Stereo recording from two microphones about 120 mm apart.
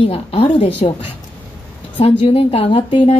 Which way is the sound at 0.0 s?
55° left (ahead or behind).